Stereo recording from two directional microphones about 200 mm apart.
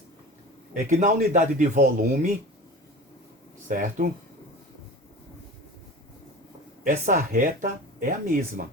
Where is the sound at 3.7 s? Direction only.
45° right (ahead or behind).